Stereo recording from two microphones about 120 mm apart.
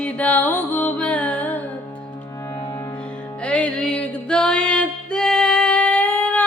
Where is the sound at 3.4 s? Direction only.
10° left (ahead or behind).